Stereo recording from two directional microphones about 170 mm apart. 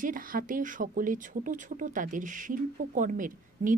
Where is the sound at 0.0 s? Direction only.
55° right (ahead or behind).